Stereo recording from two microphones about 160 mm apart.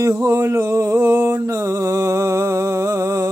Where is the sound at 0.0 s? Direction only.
15° right (ahead or behind).